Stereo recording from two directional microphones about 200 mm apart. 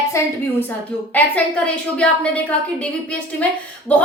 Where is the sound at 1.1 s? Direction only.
5° left (ahead or behind).